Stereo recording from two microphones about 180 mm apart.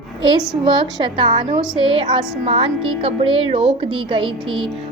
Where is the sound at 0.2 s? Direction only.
25° right (ahead or behind).